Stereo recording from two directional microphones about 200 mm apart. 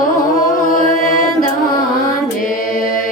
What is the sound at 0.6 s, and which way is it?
Music, 40° left (ahead or behind).